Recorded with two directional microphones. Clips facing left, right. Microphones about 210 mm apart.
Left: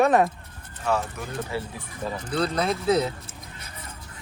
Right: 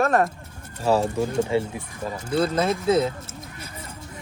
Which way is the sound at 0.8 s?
30° right (ahead or behind).